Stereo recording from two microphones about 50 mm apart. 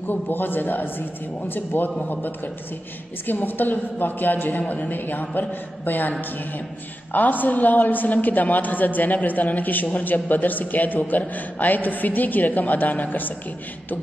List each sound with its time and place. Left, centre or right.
0.1 s a man's voice: left